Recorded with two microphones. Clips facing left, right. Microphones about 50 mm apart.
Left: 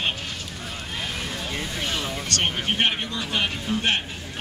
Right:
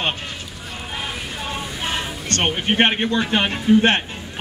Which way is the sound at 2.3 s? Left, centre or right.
Right.